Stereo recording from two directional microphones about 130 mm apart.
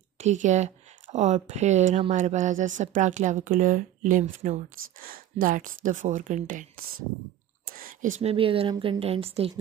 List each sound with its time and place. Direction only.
0.2 s speech: 65° right (ahead or behind)
5.0 s speech: 90° right
7.7 s a sound: 85° right
8.2 s speech: 45° right (ahead or behind)